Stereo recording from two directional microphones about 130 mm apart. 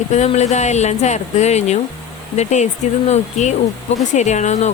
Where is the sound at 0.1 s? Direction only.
60° left (ahead or behind).